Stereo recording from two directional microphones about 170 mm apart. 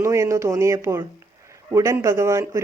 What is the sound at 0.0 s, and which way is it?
Speech, 15° right (ahead or behind).